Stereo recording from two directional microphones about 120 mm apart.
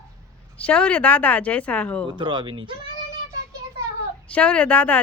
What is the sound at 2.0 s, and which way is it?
Speech, 40° right (ahead or behind).